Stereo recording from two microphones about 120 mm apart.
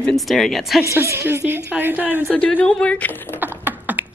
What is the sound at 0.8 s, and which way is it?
A woman's voice, 25° right (ahead or behind).